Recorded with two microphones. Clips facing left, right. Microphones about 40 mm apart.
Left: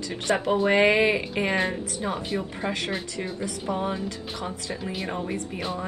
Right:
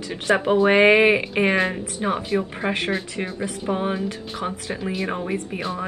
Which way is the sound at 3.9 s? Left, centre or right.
Right.